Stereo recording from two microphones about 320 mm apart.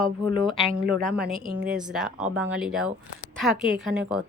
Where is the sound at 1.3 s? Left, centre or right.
Right.